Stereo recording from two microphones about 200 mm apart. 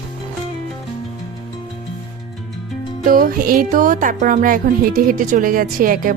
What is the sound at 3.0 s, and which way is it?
Speech, 45° right (ahead or behind).